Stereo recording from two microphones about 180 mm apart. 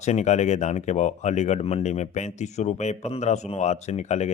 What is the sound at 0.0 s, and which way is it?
Speech, 40° left (ahead or behind).